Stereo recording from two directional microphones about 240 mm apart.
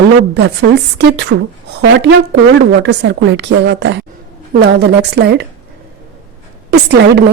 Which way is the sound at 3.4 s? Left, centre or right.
Right.